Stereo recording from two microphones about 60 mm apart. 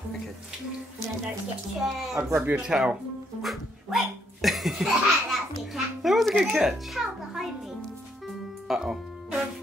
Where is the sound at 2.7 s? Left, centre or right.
Right.